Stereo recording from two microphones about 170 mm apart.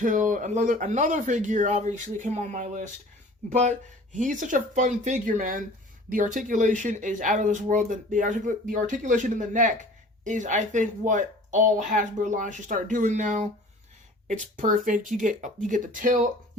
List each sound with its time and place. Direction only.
0.0 s speech: 50° right (ahead or behind)